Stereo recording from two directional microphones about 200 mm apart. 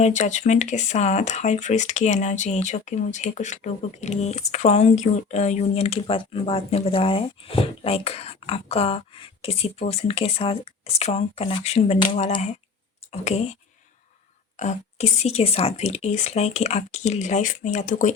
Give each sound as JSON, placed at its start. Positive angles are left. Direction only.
{"t": 0.0, "sound": "speech", "side_deg": 35}
{"t": 14.5, "sound": "speech", "side_deg": 35}